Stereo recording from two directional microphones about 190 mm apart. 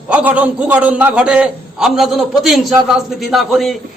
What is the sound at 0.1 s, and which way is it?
A man's voice, 5° right (ahead or behind).